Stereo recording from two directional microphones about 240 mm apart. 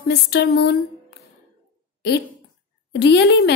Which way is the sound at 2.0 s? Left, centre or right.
Left.